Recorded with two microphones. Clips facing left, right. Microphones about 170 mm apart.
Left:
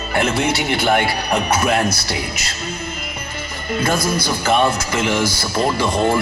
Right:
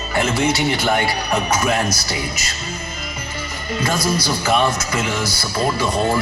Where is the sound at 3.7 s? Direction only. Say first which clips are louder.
Left 1 dB; 55° left (ahead or behind).